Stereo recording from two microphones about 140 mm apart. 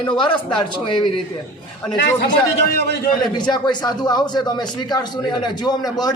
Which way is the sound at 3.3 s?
30° left (ahead or behind).